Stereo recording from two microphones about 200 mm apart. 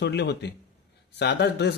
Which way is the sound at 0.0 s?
55° left (ahead or behind).